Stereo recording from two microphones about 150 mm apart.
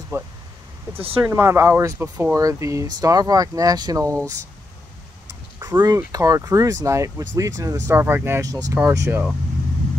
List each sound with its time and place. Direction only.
0.1 s speech: 20° right (ahead or behind)
5.6 s speech: 25° right (ahead or behind)